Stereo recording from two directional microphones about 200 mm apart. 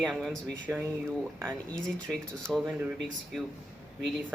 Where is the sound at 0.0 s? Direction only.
Centre (ahead or behind).